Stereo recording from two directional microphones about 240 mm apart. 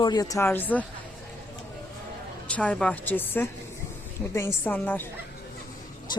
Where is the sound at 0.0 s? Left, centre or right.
Centre.